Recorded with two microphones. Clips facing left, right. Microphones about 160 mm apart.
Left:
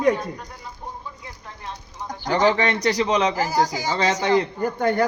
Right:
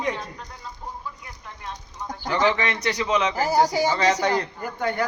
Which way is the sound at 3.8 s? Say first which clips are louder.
Even; 30° left (ahead or behind).